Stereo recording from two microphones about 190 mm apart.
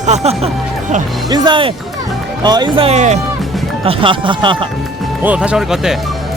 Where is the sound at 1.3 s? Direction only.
25° right (ahead or behind).